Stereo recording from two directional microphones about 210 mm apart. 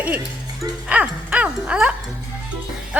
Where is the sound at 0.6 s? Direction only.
5° right (ahead or behind).